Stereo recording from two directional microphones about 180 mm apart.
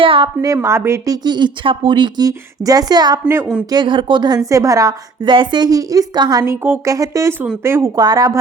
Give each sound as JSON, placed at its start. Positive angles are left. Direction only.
{"t": 0.0, "sound": "a woman's voice", "side_deg": -30}
{"t": 0.4, "sound": "a woman's voice", "side_deg": -15}